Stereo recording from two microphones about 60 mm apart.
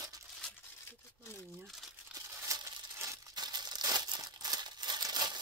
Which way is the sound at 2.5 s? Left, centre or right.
Right.